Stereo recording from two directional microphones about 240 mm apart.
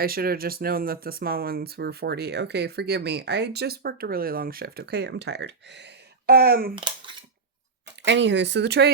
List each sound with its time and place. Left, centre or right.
0.0 s speech: right
8.0 s speech: right